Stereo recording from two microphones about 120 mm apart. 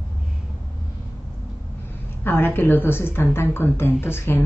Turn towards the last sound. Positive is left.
turn(degrees=20)  # may be behind; listen again after turning